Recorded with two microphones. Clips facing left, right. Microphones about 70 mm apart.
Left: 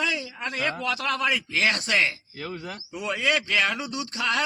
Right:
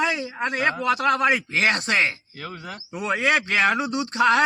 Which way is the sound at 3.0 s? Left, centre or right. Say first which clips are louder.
Right 4 dB; right.